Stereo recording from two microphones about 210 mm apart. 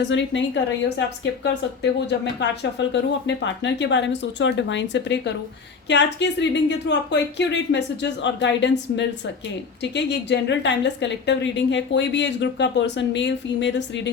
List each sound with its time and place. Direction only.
0.0 s a woman's voice: 60° left (ahead or behind)